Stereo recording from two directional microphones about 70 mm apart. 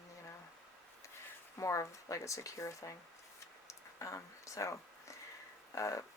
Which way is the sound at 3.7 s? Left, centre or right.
Left.